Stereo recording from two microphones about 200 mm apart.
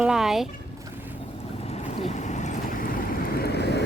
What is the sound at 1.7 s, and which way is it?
Boat, 35° left (ahead or behind).